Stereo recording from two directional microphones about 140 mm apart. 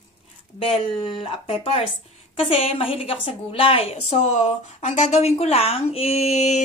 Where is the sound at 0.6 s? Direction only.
40° left (ahead or behind).